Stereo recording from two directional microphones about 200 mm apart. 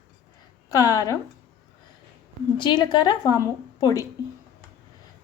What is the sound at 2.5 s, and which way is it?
A woman's voice, 20° left (ahead or behind).